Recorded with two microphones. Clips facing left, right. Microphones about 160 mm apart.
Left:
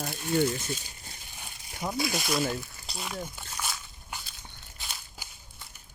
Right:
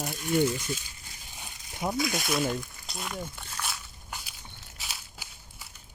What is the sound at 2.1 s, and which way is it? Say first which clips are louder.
Speech: even; centre (ahead or behind).